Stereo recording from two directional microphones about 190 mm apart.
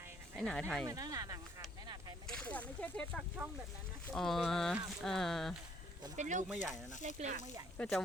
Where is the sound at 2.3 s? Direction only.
5° left (ahead or behind).